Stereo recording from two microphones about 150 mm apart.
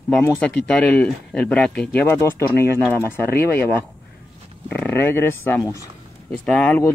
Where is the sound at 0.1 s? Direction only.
10° left (ahead or behind).